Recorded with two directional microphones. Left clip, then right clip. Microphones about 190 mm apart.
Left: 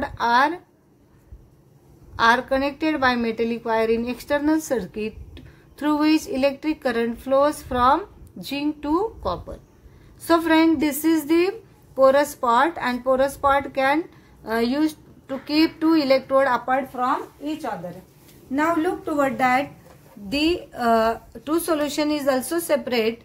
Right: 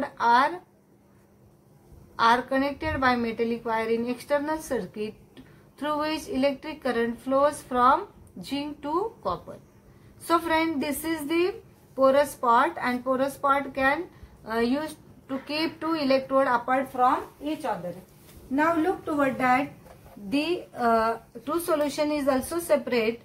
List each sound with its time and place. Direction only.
0.0 s a sound: 35° left (ahead or behind)
2.1 s a woman's voice: 35° left (ahead or behind)
18.5 s a woman's voice: 45° left (ahead or behind)